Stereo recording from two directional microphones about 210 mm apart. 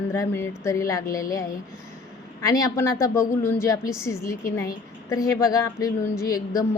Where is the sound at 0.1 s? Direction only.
10° left (ahead or behind).